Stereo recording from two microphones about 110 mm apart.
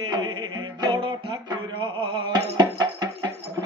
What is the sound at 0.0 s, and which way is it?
Music, 40° right (ahead or behind).